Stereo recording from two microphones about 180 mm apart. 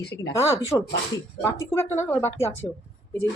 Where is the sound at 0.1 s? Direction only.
20° left (ahead or behind).